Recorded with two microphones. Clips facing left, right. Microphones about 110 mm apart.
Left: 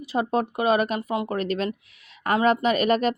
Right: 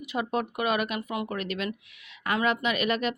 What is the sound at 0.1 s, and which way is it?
Speech, 35° left (ahead or behind).